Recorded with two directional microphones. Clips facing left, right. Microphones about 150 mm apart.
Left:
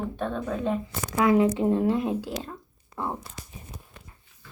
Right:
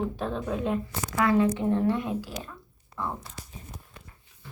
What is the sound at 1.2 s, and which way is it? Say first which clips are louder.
Speech: left 2 dB; 20° left (ahead or behind).